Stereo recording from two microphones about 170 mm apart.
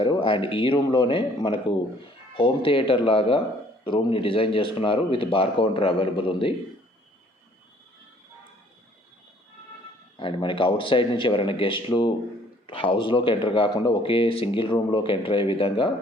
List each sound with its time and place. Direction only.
0.0 s speech: 30° left (ahead or behind)
10.2 s speech: 30° left (ahead or behind)